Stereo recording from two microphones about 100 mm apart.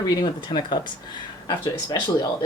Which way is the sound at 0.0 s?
50° left (ahead or behind).